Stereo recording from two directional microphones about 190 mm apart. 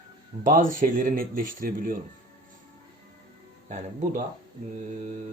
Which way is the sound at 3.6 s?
40° right (ahead or behind).